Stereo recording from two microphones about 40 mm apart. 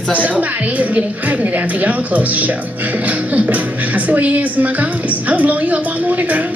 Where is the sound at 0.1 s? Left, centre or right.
Right.